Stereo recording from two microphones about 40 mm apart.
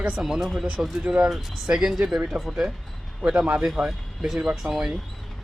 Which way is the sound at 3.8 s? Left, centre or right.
Centre.